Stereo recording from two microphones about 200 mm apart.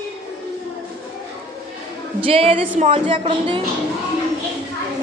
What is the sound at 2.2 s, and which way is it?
A woman's voice, 25° right (ahead or behind).